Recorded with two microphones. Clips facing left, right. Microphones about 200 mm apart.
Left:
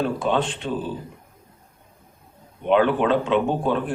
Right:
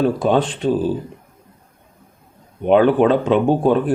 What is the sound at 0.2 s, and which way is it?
Speech, 40° right (ahead or behind).